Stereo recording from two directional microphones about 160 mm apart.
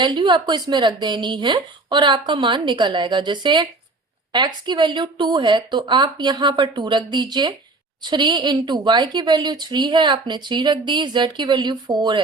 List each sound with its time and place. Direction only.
0.0 s a woman's voice: 30° right (ahead or behind)